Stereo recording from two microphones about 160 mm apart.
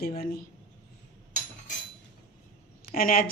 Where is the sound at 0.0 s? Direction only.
70° left (ahead or behind).